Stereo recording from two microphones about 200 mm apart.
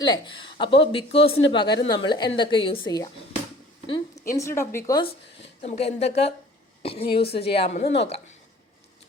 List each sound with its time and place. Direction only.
0.0 s a woman's voice: 25° left (ahead or behind)
3.8 s a sound: 25° left (ahead or behind)
4.4 s speech: 15° left (ahead or behind)
5.6 s a woman's voice: 30° left (ahead or behind)